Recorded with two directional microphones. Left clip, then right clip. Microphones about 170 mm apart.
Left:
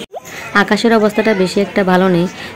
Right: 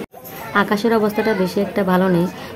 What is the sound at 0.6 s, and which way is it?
Speech, 25° left (ahead or behind).